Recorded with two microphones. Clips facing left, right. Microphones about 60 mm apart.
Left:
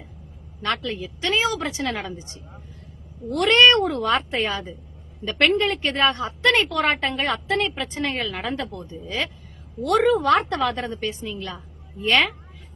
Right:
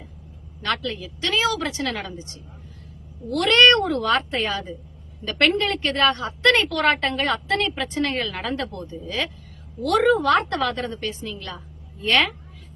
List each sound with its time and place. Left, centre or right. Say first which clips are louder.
0.6 s a woman's voice: even; left
5.9 s a woman's voice: right 1 dB; left; by 8.8 s centre
8.8 s a woman's voice: right 1 dB; centre
12.0 s a woman's voice: even; centre